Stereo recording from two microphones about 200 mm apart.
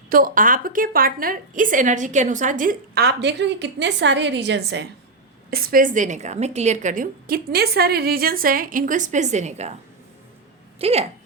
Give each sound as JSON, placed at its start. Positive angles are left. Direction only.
{"t": 0.1, "sound": "a woman's voice", "side_deg": -45}
{"t": 5.5, "sound": "a woman's voice", "side_deg": -45}
{"t": 10.8, "sound": "speech", "side_deg": -30}